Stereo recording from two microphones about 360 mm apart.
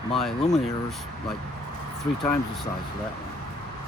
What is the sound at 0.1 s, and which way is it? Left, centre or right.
Speech, centre.